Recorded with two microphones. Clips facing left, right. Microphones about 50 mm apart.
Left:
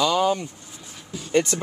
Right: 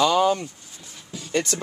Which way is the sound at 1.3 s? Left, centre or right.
Centre.